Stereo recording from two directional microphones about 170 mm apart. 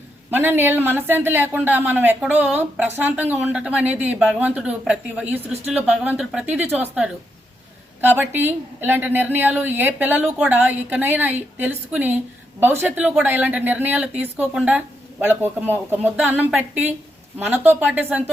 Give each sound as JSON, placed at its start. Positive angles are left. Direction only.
{"t": 0.3, "sound": "speech", "side_deg": -10}